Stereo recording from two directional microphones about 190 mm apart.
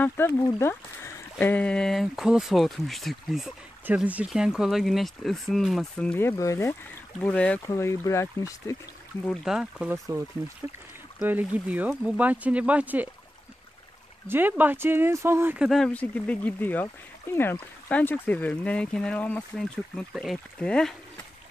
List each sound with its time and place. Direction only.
0.0 s speech: 15° left (ahead or behind)
9.2 s speech: centre (ahead or behind)
11.1 s speech: 10° right (ahead or behind)
14.2 s speech: 10° right (ahead or behind)